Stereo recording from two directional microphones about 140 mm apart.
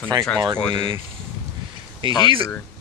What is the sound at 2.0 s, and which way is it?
Speech, 35° right (ahead or behind).